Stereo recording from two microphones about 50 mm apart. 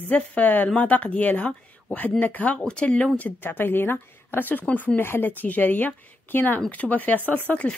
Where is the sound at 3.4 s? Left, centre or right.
Left.